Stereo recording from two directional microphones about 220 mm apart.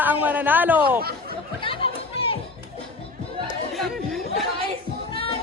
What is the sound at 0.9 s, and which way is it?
Speech, 45° right (ahead or behind).